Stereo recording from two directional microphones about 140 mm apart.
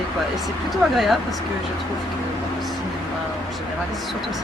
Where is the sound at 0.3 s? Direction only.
Centre (ahead or behind).